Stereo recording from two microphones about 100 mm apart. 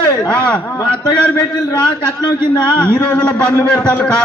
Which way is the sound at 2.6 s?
10° left (ahead or behind).